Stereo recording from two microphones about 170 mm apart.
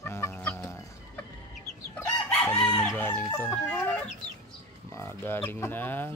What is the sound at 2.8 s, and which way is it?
Fowl, 15° left (ahead or behind).